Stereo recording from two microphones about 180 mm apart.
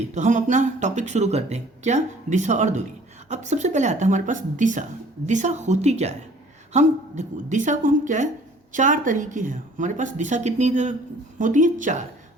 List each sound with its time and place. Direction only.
0.1 s a woman's voice: 40° right (ahead or behind)